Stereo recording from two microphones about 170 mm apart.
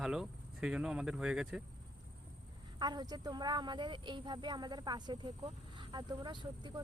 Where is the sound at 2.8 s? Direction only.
25° right (ahead or behind).